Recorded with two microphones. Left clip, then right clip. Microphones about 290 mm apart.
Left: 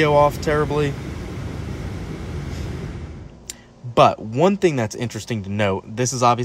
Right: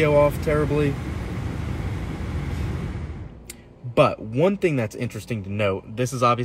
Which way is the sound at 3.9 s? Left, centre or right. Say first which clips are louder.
Left 4 dB; left.